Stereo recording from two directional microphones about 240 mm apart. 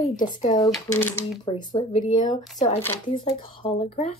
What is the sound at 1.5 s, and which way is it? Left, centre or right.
Speech, centre.